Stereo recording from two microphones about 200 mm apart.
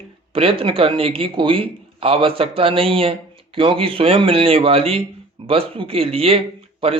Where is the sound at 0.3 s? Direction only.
30° right (ahead or behind).